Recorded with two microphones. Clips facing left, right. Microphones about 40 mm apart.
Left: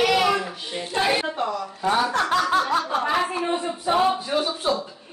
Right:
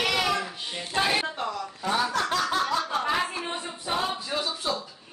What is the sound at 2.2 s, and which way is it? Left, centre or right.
Chuckle, left.